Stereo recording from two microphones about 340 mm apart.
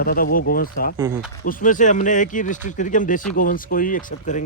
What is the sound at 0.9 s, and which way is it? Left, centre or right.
Speech, centre.